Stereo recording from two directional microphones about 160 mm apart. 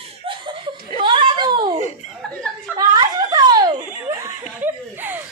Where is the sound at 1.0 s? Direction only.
30° right (ahead or behind).